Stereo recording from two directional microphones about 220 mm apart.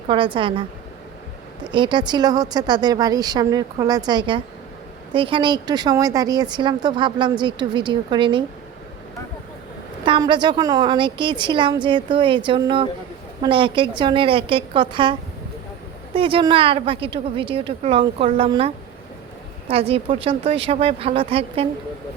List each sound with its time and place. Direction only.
0.1 s speech: 20° right (ahead or behind)
1.6 s speech: 20° right (ahead or behind)
10.1 s speech: 20° right (ahead or behind)
16.1 s speech: 25° right (ahead or behind)